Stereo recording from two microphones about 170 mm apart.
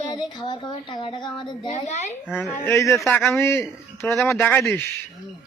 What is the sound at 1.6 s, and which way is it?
Speech, 45° left (ahead or behind).